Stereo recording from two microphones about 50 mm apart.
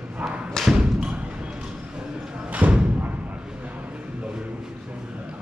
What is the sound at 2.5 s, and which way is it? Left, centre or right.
Thump, right.